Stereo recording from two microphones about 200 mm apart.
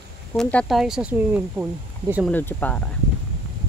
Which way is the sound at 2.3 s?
10° left (ahead or behind).